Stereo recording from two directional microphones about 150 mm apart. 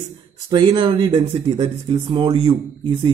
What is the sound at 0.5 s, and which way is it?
Speech, 35° right (ahead or behind).